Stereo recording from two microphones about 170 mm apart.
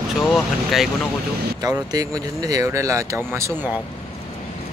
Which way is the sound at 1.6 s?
20° right (ahead or behind).